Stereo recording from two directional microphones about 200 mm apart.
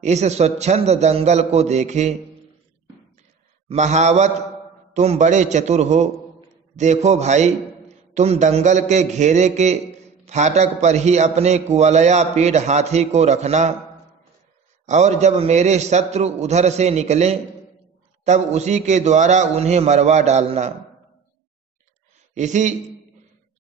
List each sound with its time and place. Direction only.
0.0 s a man's voice: 35° right (ahead or behind)
3.6 s a man's voice: 35° right (ahead or behind)
14.9 s a man's voice: 35° right (ahead or behind)
22.3 s a man's voice: 35° right (ahead or behind)